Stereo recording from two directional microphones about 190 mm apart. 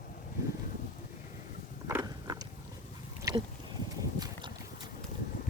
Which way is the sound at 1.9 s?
15° right (ahead or behind).